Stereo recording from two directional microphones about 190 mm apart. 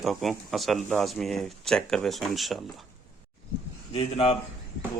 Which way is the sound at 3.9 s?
30° left (ahead or behind).